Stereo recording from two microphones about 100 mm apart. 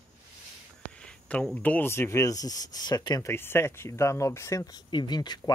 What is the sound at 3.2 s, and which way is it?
Speech, 25° left (ahead or behind).